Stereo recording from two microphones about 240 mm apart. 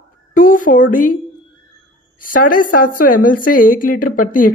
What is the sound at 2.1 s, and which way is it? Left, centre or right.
Speech, left.